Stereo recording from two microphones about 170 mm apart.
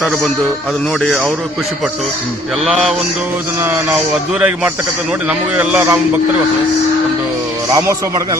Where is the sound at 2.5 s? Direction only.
Centre (ahead or behind).